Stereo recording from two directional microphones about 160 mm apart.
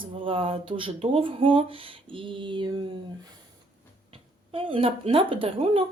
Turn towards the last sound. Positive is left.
turn(degrees=-35)  # may be behind; listen again after turning